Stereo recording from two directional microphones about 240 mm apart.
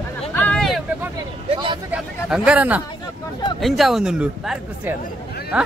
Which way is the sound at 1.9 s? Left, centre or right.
Centre.